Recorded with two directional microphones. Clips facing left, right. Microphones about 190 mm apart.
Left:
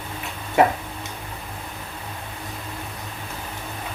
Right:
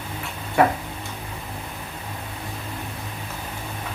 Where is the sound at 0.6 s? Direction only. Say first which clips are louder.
Left 1 dB; 20° left (ahead or behind).